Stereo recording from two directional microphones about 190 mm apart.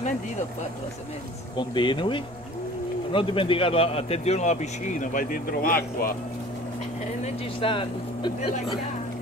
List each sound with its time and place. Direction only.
1.6 s a man's voice: 25° left (ahead or behind); by 6.1 s 50° left (ahead or behind)
7.6 s speech: 25° left (ahead or behind)